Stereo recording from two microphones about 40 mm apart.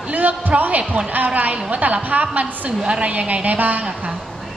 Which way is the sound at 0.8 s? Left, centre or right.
Right.